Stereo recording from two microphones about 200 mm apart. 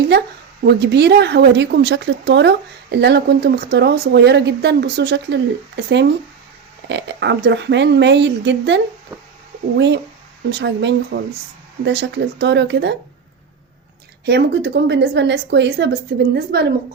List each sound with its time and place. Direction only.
0.6 s speech: 55° right (ahead or behind)
14.3 s speech: 55° right (ahead or behind)